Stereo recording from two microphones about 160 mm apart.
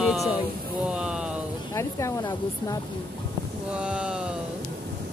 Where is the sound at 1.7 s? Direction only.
20° left (ahead or behind).